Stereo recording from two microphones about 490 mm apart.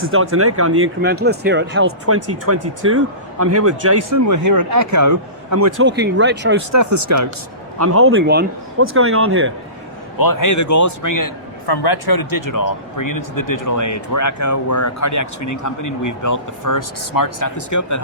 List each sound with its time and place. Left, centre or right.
0.0 s speech: right
5.8 s speech: right
6.7 s speech: right
10.2 s a man's voice: left